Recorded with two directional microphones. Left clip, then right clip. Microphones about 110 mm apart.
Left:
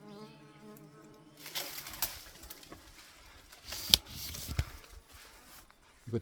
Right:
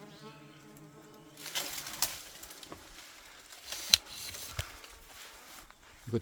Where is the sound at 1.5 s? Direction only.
5° right (ahead or behind).